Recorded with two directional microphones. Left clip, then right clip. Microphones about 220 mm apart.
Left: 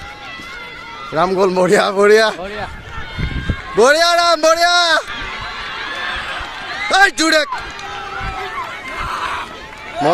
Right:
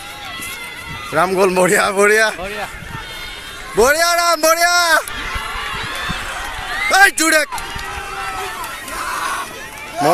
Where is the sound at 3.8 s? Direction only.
10° left (ahead or behind).